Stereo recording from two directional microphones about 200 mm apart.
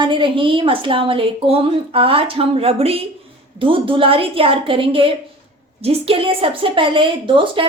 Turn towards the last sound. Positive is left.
turn(degrees=-25)  # may be behind; listen again after turning